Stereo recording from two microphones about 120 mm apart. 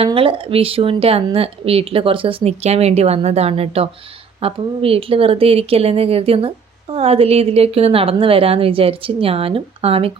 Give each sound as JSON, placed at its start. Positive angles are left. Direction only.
{"t": 0.0, "sound": "a woman's voice", "side_deg": -50}